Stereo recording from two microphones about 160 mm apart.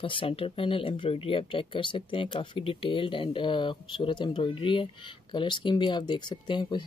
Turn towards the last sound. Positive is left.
turn(degrees=30)  # may be behind; listen again after turning